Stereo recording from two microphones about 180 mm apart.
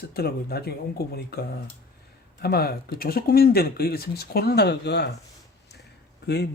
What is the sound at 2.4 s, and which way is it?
Speech, 60° left (ahead or behind).